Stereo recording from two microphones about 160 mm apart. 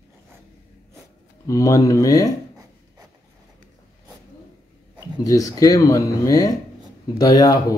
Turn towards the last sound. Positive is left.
turn(degrees=25)  # may be behind; listen again after turning